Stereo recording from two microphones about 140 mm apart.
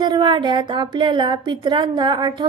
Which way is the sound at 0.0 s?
30° right (ahead or behind).